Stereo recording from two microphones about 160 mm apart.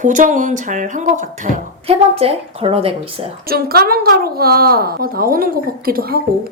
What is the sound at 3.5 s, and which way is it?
A woman's voice, 70° right (ahead or behind).